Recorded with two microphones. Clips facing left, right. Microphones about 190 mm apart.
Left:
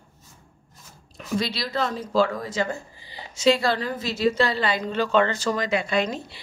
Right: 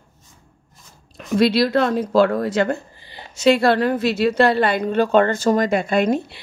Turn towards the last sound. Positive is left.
turn(degrees=-55)  # may be behind; listen again after turning